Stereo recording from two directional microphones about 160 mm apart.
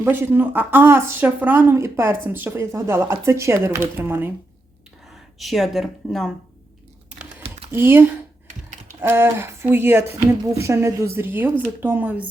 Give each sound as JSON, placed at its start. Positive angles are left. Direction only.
{"t": 0.0, "sound": "speech", "side_deg": -15}
{"t": 5.0, "sound": "speech", "side_deg": 0}
{"t": 7.1, "sound": "computer keyboard", "side_deg": -5}
{"t": 7.7, "sound": "speech", "side_deg": -15}